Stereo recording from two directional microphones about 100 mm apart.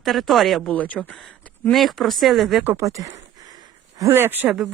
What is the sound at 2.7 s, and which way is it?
Speech, 30° right (ahead or behind).